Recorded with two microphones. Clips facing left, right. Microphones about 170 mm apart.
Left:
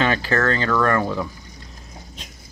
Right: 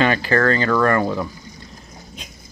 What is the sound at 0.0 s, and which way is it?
Speech, centre (ahead or behind).